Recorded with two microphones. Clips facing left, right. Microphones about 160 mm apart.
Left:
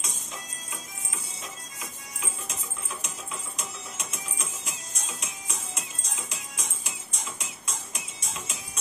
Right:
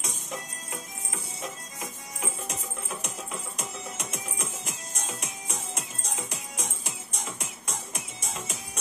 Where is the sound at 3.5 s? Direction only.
60° right (ahead or behind).